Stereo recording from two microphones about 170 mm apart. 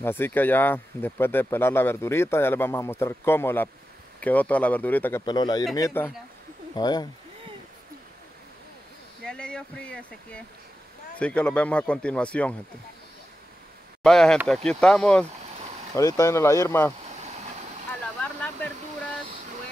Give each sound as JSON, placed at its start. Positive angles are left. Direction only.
{"t": 0.0, "sound": "speech", "side_deg": 15}
{"t": 5.2, "sound": "speech", "side_deg": 25}
{"t": 9.2, "sound": "speech", "side_deg": 5}
{"t": 14.0, "sound": "speech", "side_deg": 5}
{"t": 16.0, "sound": "speech", "side_deg": 20}
{"t": 18.2, "sound": "a sound", "side_deg": 10}